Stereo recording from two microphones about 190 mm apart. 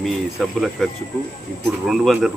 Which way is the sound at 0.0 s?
Centre (ahead or behind).